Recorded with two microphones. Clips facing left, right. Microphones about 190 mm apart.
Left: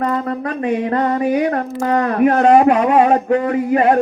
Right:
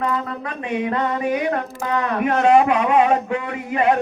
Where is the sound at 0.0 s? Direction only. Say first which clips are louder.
Left 5 dB; 40° left (ahead or behind).